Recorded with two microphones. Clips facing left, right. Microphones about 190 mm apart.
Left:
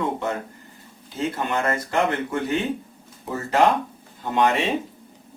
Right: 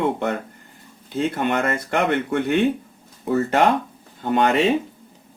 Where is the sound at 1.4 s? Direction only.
65° right (ahead or behind).